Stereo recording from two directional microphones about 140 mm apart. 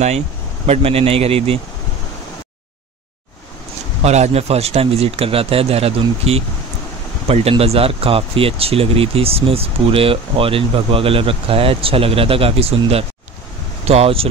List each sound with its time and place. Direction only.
0.7 s speech: 45° right (ahead or behind)
4.0 s speech: 50° right (ahead or behind)